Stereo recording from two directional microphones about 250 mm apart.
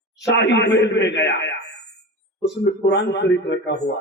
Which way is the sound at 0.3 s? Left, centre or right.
Left.